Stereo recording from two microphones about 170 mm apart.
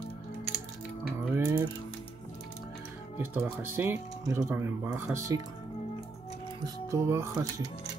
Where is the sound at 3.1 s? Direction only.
10° right (ahead or behind).